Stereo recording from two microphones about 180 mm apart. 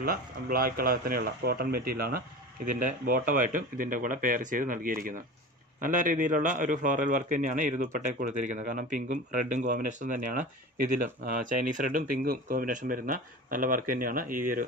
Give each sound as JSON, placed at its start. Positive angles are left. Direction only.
{"t": 0.0, "sound": "a man's voice", "side_deg": -55}